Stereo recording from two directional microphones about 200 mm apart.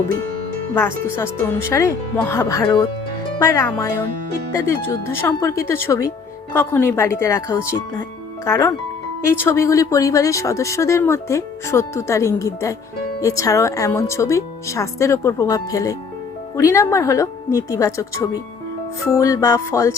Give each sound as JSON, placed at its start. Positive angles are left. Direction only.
{"t": 0.7, "sound": "speech", "side_deg": 10}